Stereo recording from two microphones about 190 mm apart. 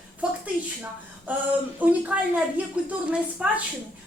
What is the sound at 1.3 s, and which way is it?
A woman's voice, 10° right (ahead or behind).